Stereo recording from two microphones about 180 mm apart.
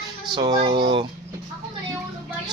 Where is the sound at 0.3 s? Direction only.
20° right (ahead or behind).